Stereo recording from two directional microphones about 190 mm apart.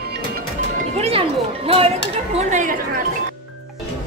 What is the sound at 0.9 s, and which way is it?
Music, 30° right (ahead or behind).